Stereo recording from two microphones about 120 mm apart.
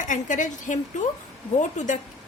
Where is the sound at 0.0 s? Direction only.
90° left.